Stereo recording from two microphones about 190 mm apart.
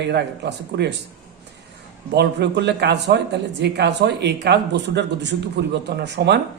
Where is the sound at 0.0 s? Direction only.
65° right (ahead or behind).